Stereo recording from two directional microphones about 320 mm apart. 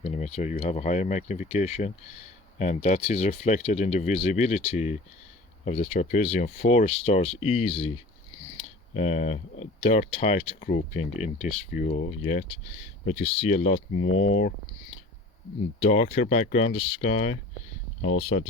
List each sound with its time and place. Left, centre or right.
0.0 s speech: centre
13.9 s speech: left
15.8 s speech: centre
18.0 s speech: left